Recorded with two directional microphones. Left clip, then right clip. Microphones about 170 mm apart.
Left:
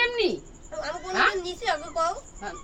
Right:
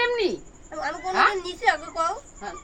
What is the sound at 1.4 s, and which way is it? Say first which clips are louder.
Speech: right 5 dB; 5° right (ahead or behind).